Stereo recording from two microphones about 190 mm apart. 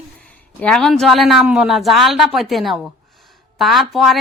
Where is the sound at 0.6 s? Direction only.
5° left (ahead or behind).